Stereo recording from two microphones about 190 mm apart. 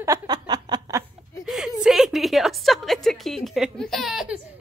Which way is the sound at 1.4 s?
5° right (ahead or behind).